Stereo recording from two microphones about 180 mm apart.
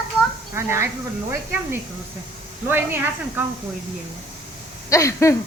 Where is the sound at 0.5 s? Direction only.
15° right (ahead or behind).